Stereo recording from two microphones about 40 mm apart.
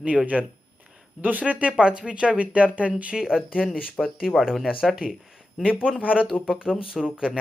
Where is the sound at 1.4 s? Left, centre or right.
Right.